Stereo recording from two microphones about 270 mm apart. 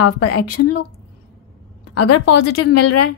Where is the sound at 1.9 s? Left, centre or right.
Left.